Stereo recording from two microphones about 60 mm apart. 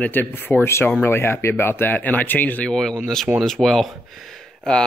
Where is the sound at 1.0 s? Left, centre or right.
Left.